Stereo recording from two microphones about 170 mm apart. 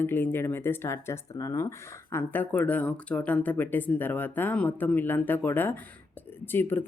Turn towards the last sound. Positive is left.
turn(degrees=10)  # may be behind; listen again after turning